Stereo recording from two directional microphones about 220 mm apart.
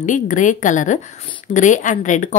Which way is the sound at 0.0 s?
35° left (ahead or behind).